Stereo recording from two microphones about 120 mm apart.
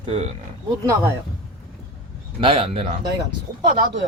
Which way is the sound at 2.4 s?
55° right (ahead or behind).